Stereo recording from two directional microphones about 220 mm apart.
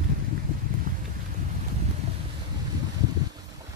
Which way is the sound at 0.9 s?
40° right (ahead or behind).